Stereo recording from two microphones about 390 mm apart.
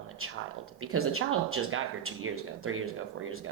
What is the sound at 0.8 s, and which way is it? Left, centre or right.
Speech, right.